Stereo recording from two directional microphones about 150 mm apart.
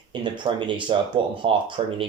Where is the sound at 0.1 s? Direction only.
30° right (ahead or behind).